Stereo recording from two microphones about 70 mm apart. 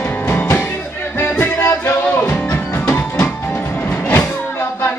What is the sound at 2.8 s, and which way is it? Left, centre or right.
Music, left.